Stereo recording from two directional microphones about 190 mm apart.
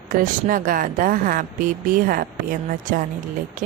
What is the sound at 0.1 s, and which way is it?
A woman's voice, 45° right (ahead or behind).